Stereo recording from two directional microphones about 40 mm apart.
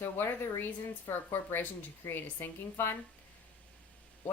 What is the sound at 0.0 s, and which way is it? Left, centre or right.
Speech, left.